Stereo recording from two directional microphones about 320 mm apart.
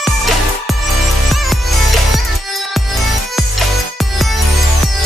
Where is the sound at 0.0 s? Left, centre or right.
Centre.